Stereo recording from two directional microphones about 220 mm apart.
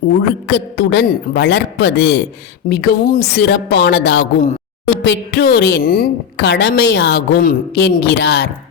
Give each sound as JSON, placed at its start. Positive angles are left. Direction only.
{"t": 0.2, "sound": "a woman's voice", "side_deg": 50}